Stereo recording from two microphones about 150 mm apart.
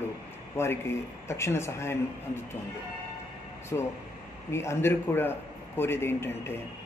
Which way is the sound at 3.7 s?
20° left (ahead or behind).